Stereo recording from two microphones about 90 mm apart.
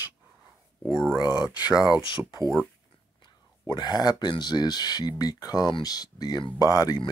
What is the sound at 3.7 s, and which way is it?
Speech, 50° left (ahead or behind).